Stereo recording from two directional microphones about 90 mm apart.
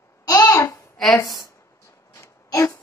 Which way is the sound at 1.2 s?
40° left (ahead or behind).